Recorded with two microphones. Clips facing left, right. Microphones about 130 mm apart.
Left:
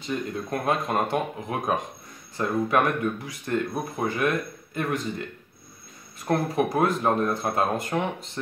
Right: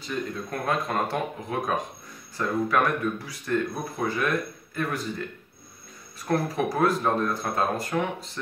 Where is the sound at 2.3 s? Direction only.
25° left (ahead or behind).